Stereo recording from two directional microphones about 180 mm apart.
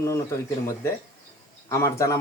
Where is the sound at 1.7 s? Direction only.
15° left (ahead or behind).